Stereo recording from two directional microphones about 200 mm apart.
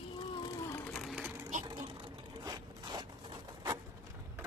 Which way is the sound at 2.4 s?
20° right (ahead or behind).